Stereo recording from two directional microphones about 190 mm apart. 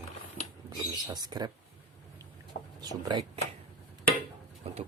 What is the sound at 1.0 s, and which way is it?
Speech, 20° right (ahead or behind).